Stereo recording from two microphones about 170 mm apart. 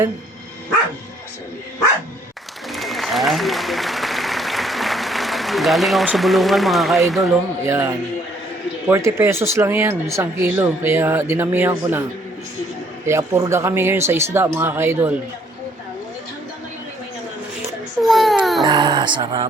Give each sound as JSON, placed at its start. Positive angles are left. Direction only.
{"t": 2.7, "sound": "applause", "side_deg": 0}
{"t": 7.6, "sound": "speech", "side_deg": -15}
{"t": 13.1, "sound": "speech", "side_deg": -15}
{"t": 18.0, "sound": "baby cry", "side_deg": 0}
{"t": 18.6, "sound": "speech", "side_deg": -25}